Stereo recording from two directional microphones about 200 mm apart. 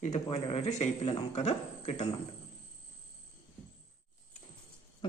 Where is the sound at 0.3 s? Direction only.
30° left (ahead or behind).